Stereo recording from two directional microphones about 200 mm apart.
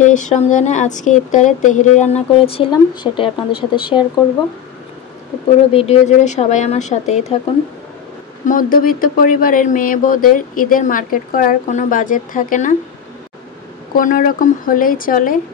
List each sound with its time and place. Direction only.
0.0 s speech: 40° left (ahead or behind)
5.7 s speech: 30° left (ahead or behind)
8.5 s speech: 45° left (ahead or behind)
13.9 s speech: 45° left (ahead or behind)